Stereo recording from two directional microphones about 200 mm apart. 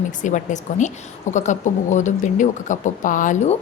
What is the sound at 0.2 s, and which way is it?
A woman's voice, 40° left (ahead or behind).